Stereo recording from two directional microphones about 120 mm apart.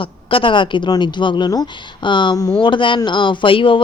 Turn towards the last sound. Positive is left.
turn(degrees=45)  # may be behind; listen again after turning